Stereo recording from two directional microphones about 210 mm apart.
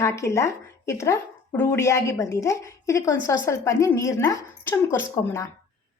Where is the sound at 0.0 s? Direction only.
15° left (ahead or behind).